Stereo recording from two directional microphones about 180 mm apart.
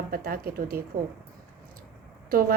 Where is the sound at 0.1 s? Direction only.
55° right (ahead or behind).